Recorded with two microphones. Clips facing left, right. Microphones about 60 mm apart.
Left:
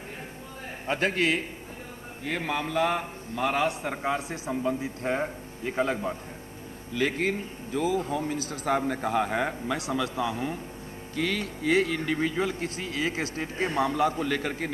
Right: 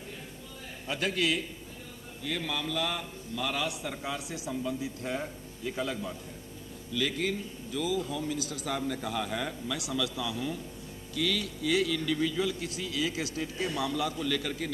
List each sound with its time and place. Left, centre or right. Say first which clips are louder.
0.8 s a man's voice: left 4 dB; left